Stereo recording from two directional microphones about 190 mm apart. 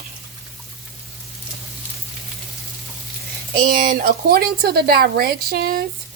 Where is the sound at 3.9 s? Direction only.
50° right (ahead or behind).